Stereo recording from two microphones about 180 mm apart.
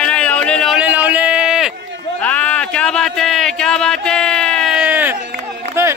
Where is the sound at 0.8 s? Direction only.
10° right (ahead or behind).